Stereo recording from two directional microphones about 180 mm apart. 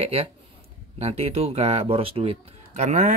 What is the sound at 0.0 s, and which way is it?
Speech, 35° right (ahead or behind).